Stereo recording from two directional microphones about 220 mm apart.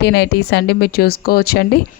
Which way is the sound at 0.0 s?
50° left (ahead or behind).